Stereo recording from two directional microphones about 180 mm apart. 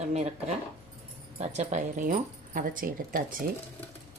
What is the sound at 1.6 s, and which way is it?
Speech, 45° right (ahead or behind).